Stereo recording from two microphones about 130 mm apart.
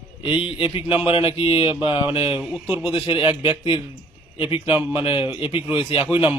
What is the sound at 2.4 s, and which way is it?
Speech, 5° right (ahead or behind).